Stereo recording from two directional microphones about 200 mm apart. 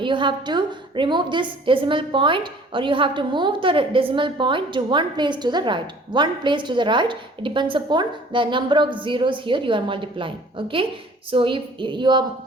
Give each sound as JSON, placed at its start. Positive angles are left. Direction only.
{"t": 0.0, "sound": "a woman's voice", "side_deg": -25}